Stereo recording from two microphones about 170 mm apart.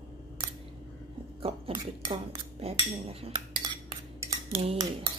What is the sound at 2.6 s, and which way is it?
Speech, 35° right (ahead or behind).